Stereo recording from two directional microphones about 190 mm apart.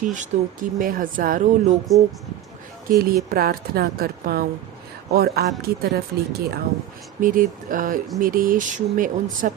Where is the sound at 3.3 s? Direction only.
50° right (ahead or behind).